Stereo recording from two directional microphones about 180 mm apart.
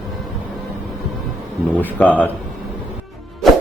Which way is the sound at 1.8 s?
10° left (ahead or behind).